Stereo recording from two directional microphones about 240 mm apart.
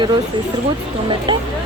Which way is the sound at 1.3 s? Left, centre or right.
Right.